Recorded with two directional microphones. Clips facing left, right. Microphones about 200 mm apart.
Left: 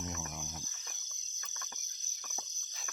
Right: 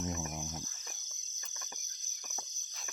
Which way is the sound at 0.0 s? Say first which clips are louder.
Right 4 dB; 20° right (ahead or behind).